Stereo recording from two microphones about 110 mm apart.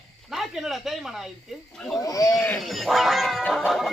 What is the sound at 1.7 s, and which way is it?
Cat, 5° left (ahead or behind).